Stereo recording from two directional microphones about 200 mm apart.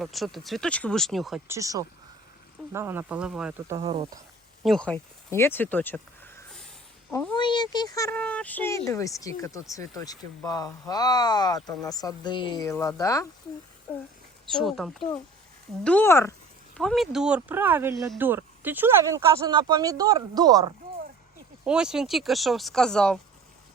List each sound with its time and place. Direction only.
0.0 s speech: centre (ahead or behind)
1.5 s speech: 15° right (ahead or behind)
3.8 s speech: 25° right (ahead or behind)
4.6 s speech: 5° left (ahead or behind)
7.3 s speech: 20° left (ahead or behind)
14.5 s speech: centre (ahead or behind)
16.7 s speech: centre (ahead or behind); by 20.7 s 20° right (ahead or behind)
21.6 s speech: 5° right (ahead or behind)